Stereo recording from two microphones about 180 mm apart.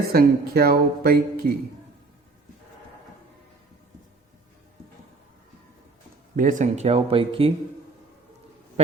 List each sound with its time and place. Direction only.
0.1 s speech: 55° right (ahead or behind)
6.3 s speech: 45° right (ahead or behind); by 7.5 s 30° right (ahead or behind)